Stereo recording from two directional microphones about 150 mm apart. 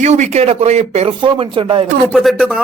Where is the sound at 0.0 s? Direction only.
50° right (ahead or behind).